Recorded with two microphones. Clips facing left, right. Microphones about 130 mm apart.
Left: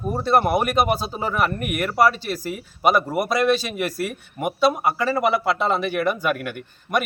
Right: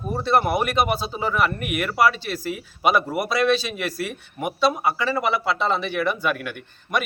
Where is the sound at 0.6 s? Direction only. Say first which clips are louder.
Left 2 dB; 45° left (ahead or behind).